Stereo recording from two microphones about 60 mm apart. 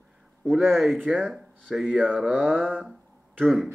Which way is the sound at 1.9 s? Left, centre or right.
Right.